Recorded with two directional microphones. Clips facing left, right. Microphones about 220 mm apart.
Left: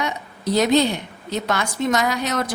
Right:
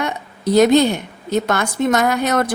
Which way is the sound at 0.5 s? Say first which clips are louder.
Right 5 dB; 50° right (ahead or behind).